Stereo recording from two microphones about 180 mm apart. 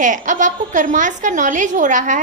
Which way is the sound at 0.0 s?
45° right (ahead or behind).